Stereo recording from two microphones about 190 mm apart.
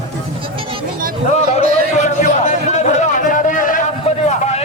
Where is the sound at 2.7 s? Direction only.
40° left (ahead or behind).